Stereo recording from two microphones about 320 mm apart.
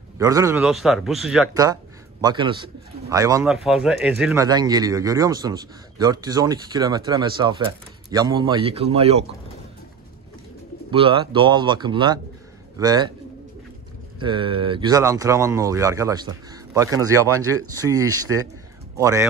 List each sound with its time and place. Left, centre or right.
0.2 s a man's voice: centre
1.5 s speech: centre
10.9 s speech: centre
14.2 s speech: centre
18.9 s speech: centre